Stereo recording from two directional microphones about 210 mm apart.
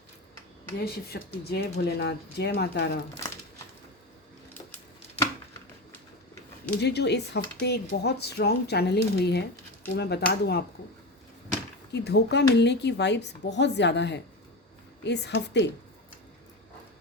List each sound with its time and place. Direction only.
0.8 s speech: 50° left (ahead or behind)
6.7 s speech: 50° left (ahead or behind)
11.9 s speech: 50° left (ahead or behind)